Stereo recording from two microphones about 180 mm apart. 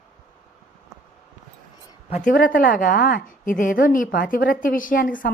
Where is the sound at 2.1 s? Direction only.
50° left (ahead or behind).